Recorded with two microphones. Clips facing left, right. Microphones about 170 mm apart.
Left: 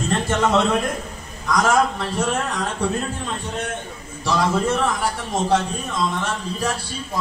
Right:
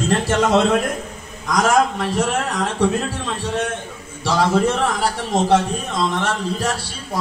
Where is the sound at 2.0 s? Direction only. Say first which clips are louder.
Right 3 dB; 90° right.